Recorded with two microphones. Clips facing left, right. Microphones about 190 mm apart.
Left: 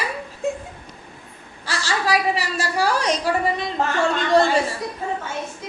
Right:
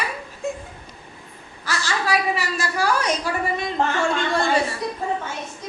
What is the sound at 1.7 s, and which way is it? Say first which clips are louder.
A woman's voice: left 1 dB; 35° left (ahead or behind).